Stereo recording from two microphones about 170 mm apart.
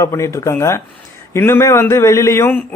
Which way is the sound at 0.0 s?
20° left (ahead or behind).